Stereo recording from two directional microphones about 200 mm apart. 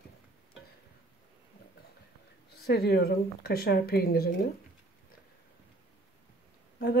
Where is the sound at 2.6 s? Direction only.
55° left (ahead or behind).